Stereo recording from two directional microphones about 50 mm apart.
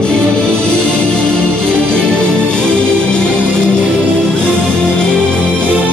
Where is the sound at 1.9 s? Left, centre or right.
Centre.